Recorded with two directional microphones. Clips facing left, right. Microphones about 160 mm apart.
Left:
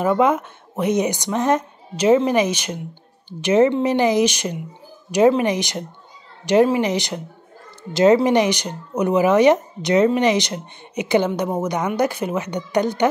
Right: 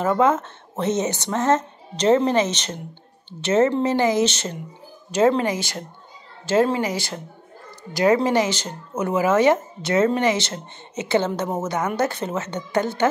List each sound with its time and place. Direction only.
0.0 s speech: 15° left (ahead or behind)